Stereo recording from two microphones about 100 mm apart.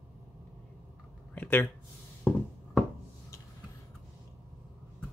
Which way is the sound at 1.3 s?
20° left (ahead or behind).